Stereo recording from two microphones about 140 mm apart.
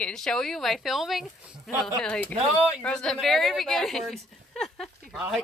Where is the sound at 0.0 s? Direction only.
5° left (ahead or behind).